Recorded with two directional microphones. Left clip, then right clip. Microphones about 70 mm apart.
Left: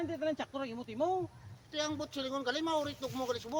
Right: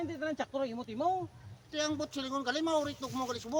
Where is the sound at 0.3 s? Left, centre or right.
Right.